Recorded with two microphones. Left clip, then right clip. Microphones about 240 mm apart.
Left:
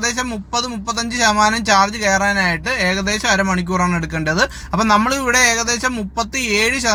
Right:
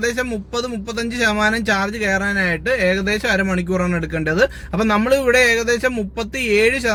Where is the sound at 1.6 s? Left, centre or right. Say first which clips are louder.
Left 5 dB; centre.